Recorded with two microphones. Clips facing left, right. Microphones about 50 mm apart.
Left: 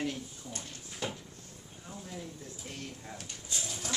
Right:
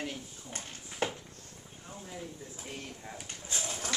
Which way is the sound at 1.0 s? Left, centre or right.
Right.